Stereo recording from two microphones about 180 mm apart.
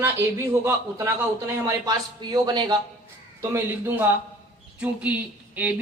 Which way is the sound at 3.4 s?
10° right (ahead or behind).